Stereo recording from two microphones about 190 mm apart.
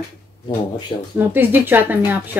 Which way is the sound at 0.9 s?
25° left (ahead or behind).